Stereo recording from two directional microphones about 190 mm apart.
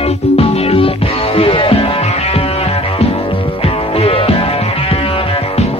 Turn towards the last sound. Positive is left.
turn(degrees=30)  # may be behind; listen again after turning